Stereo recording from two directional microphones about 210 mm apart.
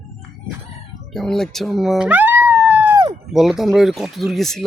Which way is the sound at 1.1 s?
Centre (ahead or behind).